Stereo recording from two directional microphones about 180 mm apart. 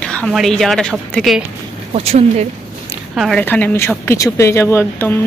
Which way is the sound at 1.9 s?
35° right (ahead or behind).